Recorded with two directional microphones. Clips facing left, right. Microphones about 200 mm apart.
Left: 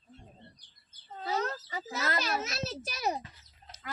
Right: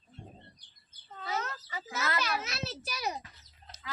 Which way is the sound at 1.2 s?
35° left (ahead or behind).